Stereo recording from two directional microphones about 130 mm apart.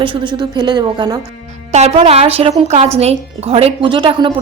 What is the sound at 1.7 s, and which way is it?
A woman's voice, 60° right (ahead or behind).